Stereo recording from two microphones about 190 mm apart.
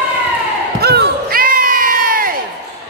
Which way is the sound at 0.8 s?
55° right (ahead or behind).